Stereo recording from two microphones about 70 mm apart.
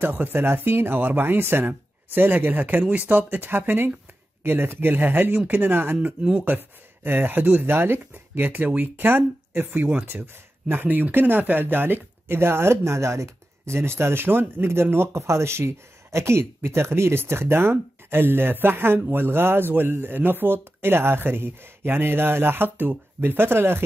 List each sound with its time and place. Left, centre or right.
0.0 s speech: right
9.8 s speech: centre
10.0 s speech: right